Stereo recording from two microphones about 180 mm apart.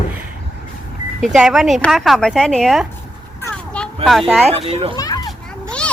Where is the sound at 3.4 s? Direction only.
5° left (ahead or behind).